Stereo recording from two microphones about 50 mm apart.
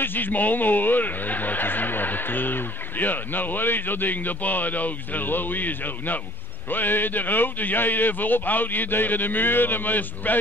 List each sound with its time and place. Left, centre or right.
0.0 s speech: left